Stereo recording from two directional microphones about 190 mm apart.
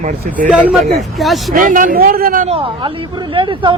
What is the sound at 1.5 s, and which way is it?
Speech, 45° right (ahead or behind).